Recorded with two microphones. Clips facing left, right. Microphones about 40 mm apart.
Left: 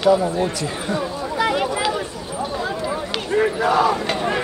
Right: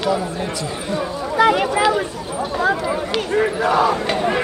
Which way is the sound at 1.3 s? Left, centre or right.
Right.